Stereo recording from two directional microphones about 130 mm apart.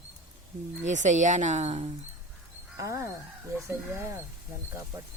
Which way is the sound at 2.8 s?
25° right (ahead or behind).